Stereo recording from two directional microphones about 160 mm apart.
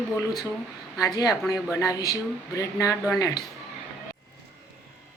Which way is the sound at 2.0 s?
20° left (ahead or behind).